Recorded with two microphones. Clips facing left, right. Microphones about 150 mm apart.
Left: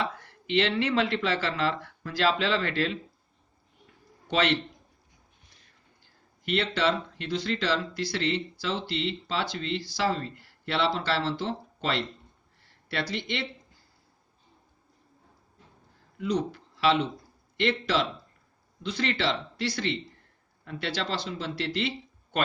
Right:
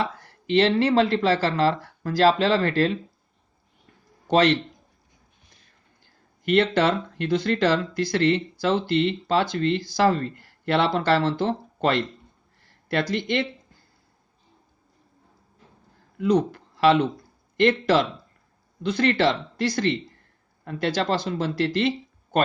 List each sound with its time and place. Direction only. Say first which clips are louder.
0.0 s speech: right 4 dB; 40° right (ahead or behind)
4.3 s a man's voice: right 7 dB; 40° right (ahead or behind)
6.4 s speech: right 7 dB; 50° right (ahead or behind)
16.1 s speech: right 7 dB; 55° right (ahead or behind)